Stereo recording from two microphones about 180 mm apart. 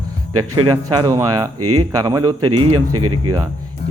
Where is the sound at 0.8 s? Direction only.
20° right (ahead or behind).